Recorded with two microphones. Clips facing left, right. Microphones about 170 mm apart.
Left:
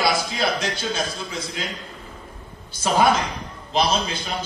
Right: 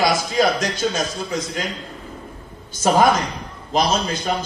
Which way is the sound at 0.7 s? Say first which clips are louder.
Right 4 dB; 45° right (ahead or behind).